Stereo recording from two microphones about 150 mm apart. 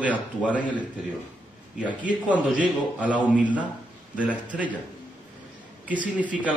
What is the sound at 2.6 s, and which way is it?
Speech, 10° right (ahead or behind).